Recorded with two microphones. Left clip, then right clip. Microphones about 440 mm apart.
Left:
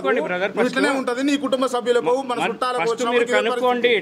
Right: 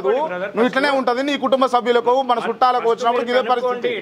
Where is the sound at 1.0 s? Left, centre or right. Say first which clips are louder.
Right 3 dB; right.